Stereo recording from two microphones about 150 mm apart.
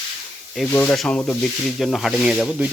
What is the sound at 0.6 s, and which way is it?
Rub, 10° left (ahead or behind).